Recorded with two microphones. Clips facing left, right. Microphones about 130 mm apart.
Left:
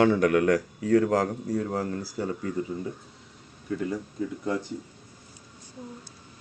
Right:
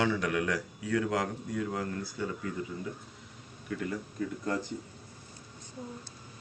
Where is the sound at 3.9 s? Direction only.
15° left (ahead or behind).